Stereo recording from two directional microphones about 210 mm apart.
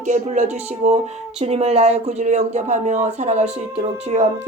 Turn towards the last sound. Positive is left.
turn(degrees=-30)  # may be behind; listen again after turning